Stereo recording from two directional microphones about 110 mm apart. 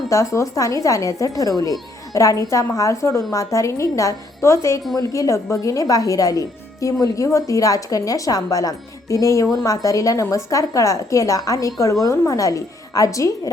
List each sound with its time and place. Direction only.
0.1 s a woman's voice: 30° left (ahead or behind)